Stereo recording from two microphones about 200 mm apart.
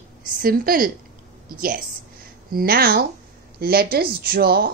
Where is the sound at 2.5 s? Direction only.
50° right (ahead or behind).